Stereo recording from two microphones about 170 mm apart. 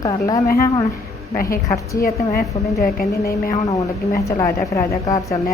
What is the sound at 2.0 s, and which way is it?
A woman's voice, 60° left (ahead or behind).